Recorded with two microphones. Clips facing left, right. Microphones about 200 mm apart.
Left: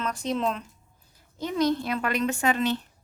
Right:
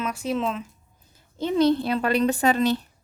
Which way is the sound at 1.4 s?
30° right (ahead or behind).